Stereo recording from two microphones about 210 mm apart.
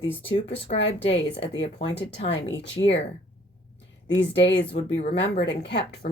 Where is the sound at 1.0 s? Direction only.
25° left (ahead or behind).